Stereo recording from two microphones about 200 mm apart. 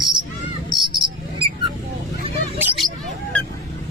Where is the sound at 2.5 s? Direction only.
10° right (ahead or behind).